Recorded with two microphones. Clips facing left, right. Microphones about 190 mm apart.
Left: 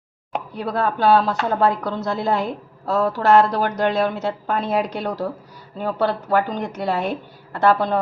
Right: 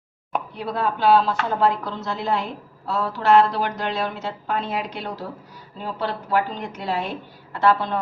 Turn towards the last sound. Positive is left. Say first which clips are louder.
# left 3 dB
turn(degrees=40)  # may be behind; listen again after turning